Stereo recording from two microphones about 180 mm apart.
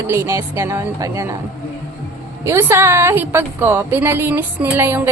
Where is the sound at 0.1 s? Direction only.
15° right (ahead or behind).